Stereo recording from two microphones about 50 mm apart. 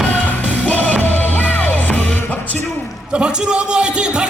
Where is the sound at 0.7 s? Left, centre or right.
Left.